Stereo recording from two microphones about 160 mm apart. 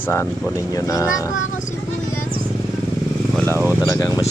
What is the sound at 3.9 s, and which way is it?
Speech, 20° left (ahead or behind).